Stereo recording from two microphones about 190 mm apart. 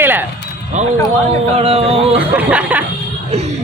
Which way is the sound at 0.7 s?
40° right (ahead or behind).